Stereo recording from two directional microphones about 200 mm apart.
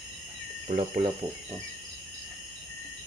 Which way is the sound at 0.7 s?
35° right (ahead or behind).